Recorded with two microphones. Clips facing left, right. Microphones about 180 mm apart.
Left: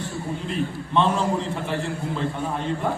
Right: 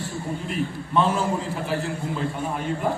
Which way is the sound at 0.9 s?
5° right (ahead or behind).